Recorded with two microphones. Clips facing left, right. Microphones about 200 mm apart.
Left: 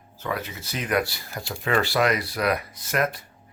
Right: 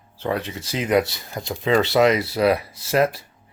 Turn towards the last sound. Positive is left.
turn(degrees=-30)  # may be behind; listen again after turning